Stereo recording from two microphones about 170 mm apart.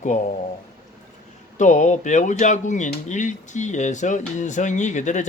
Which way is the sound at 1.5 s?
45° left (ahead or behind).